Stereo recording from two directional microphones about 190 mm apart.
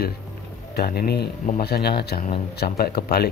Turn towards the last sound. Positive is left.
turn(degrees=55)  # may be behind; listen again after turning